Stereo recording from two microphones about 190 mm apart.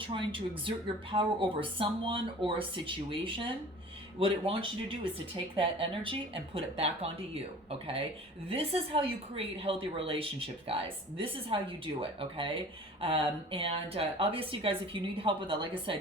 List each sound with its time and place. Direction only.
0.0 s speech: 25° right (ahead or behind)